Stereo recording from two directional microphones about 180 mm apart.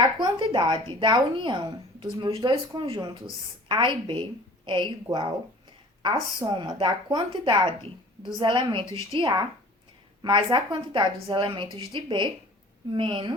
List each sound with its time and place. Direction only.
0.2 s speech: 25° right (ahead or behind)